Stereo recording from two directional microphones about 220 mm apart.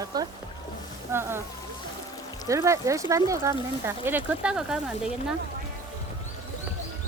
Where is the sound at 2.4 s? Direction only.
15° right (ahead or behind).